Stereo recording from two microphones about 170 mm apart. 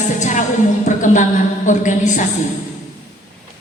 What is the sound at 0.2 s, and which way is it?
A woman's voice, 45° left (ahead or behind).